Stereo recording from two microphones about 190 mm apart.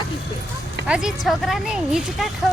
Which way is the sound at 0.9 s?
Centre (ahead or behind).